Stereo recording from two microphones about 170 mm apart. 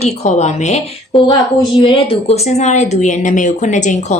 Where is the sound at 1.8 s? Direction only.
30° left (ahead or behind).